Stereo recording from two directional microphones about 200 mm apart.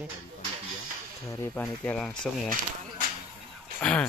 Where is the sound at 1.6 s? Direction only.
5° left (ahead or behind).